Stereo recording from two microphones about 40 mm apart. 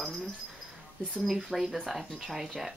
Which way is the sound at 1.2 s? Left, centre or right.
Centre.